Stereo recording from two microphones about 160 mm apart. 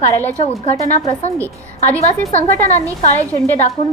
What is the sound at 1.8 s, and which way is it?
Speech, 40° left (ahead or behind).